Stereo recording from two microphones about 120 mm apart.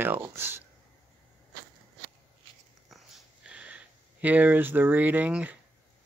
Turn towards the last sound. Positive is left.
turn(degrees=-10)  # may be behind; listen again after turning